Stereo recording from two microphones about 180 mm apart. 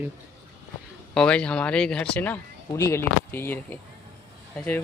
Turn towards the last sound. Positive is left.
turn(degrees=10)  # may be behind; listen again after turning